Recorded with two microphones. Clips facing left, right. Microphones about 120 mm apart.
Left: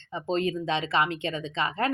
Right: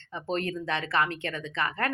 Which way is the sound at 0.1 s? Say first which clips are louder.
Left 3 dB; 15° left (ahead or behind).